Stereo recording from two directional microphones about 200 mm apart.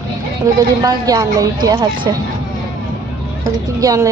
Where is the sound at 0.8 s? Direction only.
20° right (ahead or behind).